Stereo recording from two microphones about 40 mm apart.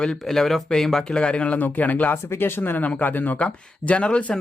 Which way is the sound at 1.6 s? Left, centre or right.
Left.